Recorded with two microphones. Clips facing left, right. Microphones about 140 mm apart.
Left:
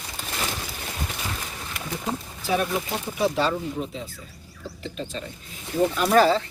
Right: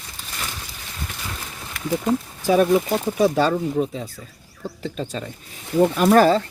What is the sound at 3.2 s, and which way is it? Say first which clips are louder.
Speech: right 4 dB; 45° right (ahead or behind).